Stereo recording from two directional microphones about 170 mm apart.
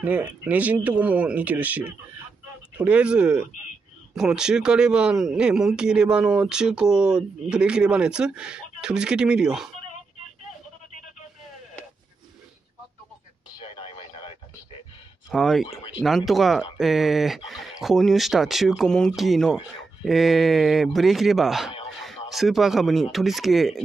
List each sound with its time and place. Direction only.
0.0 s speech: 10° right (ahead or behind)
13.7 s a sound: 30° left (ahead or behind)
15.3 s speech: centre (ahead or behind)